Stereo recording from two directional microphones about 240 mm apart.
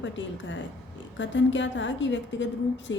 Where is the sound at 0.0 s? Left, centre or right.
Left.